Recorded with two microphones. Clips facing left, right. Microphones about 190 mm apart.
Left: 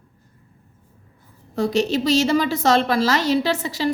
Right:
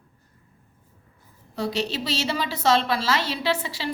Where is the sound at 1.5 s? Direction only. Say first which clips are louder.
Left 7 dB; 45° left (ahead or behind).